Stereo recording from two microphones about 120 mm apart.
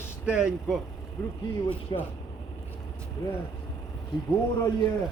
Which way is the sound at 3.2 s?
25° left (ahead or behind).